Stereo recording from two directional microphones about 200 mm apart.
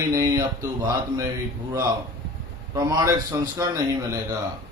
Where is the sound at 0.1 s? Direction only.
15° right (ahead or behind).